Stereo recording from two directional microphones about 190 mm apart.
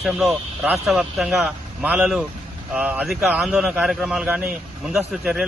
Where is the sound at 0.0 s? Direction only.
Centre (ahead or behind).